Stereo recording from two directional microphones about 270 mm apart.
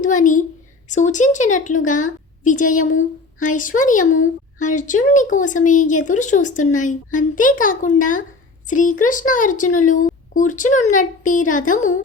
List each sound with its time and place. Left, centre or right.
0.0 s a woman's voice: left